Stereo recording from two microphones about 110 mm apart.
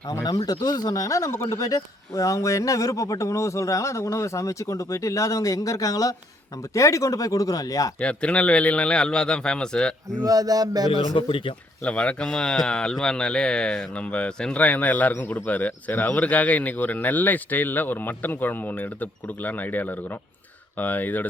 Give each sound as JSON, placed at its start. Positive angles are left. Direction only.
{"t": 0.1, "sound": "speech", "side_deg": 35}
{"t": 7.9, "sound": "speech", "side_deg": 10}
{"t": 10.2, "sound": "speech", "side_deg": -35}
{"t": 10.9, "sound": "speech", "side_deg": 50}
{"t": 11.8, "sound": "speech", "side_deg": 10}